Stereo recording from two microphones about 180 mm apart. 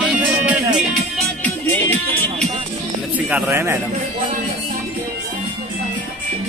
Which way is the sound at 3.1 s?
10° right (ahead or behind).